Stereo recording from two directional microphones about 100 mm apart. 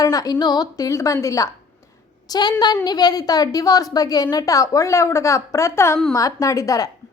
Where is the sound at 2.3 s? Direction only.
45° left (ahead or behind).